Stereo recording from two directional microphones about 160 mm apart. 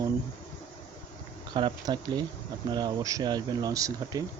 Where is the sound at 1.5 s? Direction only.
30° right (ahead or behind).